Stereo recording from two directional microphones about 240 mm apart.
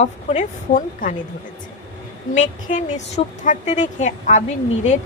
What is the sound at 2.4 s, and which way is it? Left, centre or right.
A woman's voice, left.